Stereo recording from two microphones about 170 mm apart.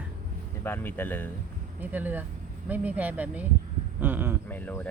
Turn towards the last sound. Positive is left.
turn(degrees=10)  # may be behind; listen again after turning